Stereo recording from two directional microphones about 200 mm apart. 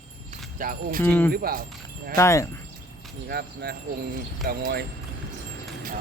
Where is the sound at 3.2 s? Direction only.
50° right (ahead or behind).